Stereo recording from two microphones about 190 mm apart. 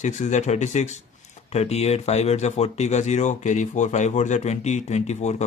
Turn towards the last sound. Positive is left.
turn(degrees=35)  # may be behind; listen again after turning